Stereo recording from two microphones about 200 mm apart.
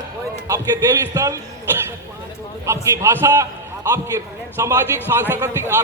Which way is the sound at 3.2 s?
15° right (ahead or behind).